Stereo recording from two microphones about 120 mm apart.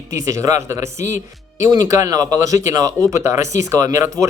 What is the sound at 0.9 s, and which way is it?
Speech, 85° left.